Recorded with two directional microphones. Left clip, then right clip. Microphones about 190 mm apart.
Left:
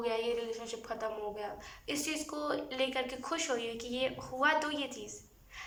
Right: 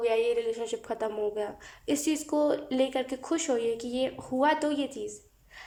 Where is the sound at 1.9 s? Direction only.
35° right (ahead or behind).